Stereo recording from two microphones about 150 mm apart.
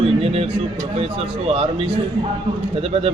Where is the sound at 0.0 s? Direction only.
40° right (ahead or behind).